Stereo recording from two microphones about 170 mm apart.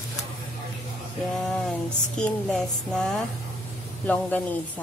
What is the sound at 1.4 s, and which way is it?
Speech, 5° left (ahead or behind).